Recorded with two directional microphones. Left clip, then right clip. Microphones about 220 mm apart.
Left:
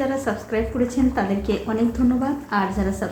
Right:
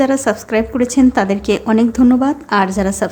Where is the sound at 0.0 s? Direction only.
45° right (ahead or behind).